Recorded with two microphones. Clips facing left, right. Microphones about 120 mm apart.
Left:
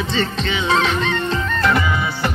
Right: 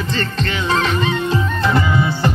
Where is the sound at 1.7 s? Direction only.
25° right (ahead or behind).